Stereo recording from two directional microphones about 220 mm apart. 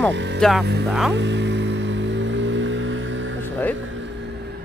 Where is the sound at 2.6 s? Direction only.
60° right (ahead or behind).